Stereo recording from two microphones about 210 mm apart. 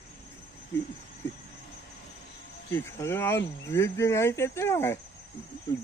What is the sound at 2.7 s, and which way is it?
Speech, 10° left (ahead or behind).